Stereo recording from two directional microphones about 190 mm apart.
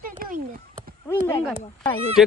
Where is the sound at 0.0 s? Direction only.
45° right (ahead or behind).